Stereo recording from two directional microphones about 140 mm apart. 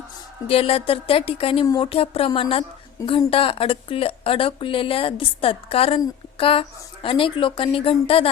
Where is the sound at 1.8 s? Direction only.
40° left (ahead or behind).